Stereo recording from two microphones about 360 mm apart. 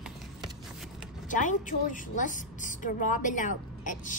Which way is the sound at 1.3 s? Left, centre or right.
Left.